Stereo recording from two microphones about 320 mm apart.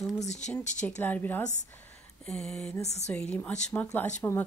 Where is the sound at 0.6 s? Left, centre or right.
Left.